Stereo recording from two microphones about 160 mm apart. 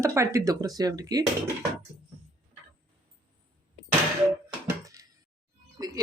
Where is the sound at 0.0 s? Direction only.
20° right (ahead or behind).